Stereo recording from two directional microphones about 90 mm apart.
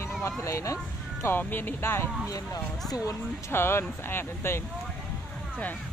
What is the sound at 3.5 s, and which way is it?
Speech, 25° left (ahead or behind).